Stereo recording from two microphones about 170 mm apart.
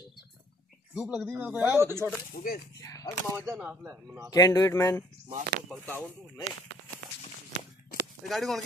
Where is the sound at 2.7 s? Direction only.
20° left (ahead or behind).